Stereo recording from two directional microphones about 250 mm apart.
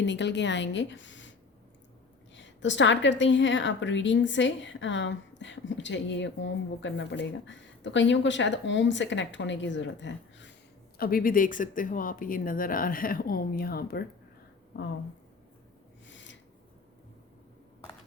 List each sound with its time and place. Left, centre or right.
0.0 s a woman's voice: left
2.3 s a woman's voice: left
16.0 s a sound: left